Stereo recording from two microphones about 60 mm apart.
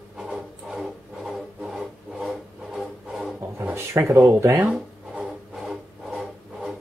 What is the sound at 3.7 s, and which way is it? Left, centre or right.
Speech, right.